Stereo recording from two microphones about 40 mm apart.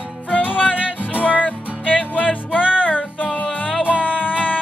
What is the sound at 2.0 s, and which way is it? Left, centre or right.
Music, left.